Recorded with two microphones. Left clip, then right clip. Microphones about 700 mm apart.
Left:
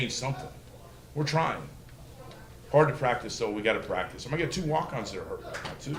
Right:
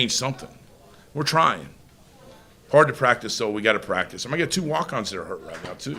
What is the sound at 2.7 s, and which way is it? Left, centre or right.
Speech, right.